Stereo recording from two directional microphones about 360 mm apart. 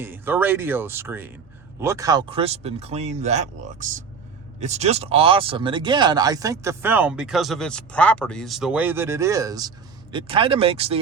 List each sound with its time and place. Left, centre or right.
0.0 s speech: centre